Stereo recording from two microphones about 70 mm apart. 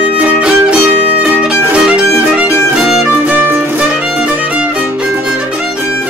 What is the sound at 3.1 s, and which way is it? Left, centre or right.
Music, right.